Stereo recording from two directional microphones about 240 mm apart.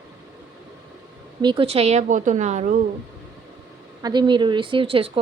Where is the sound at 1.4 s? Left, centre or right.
Right.